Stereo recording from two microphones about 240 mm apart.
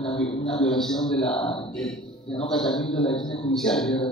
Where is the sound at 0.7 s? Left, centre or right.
Centre.